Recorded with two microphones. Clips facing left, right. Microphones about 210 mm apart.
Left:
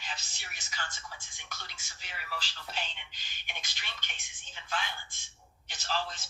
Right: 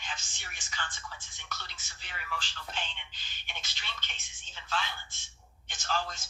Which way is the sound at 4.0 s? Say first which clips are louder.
Right 1 dB; 50° left (ahead or behind).